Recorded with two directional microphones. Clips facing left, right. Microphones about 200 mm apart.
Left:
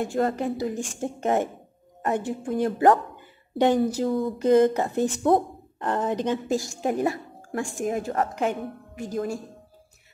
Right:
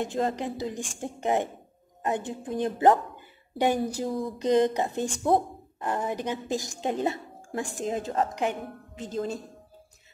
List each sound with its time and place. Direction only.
0.0 s a woman's voice: 20° right (ahead or behind)